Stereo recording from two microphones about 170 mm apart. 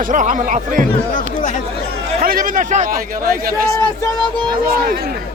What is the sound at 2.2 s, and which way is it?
Speech, 55° right (ahead or behind).